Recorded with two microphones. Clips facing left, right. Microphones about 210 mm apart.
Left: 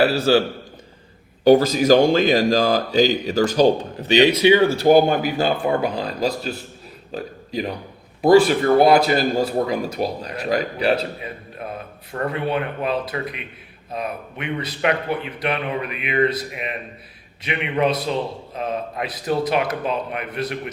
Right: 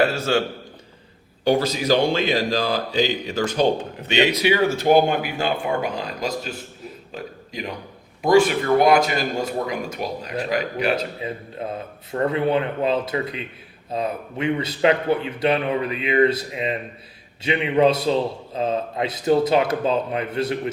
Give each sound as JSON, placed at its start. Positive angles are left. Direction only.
{"t": 0.0, "sound": "speech", "side_deg": 35}
{"t": 1.5, "sound": "a man's voice", "side_deg": 45}
{"t": 4.8, "sound": "a man's voice", "side_deg": 40}
{"t": 11.2, "sound": "a man's voice", "side_deg": -25}